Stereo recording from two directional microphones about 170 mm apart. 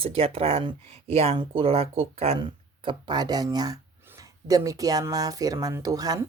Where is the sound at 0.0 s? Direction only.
35° right (ahead or behind).